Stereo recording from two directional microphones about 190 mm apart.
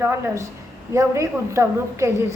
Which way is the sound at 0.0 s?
15° right (ahead or behind).